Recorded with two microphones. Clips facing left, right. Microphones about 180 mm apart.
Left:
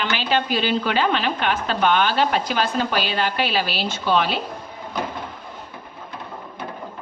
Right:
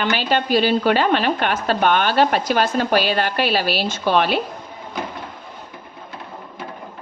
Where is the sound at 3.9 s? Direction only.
55° right (ahead or behind).